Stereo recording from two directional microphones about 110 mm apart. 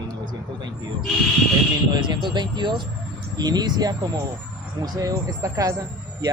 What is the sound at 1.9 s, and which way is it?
Speech, 45° right (ahead or behind).